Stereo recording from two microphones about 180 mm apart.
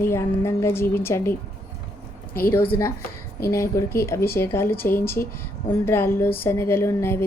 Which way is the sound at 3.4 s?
15° left (ahead or behind).